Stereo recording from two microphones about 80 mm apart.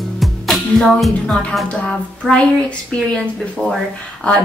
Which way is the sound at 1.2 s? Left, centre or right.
Centre.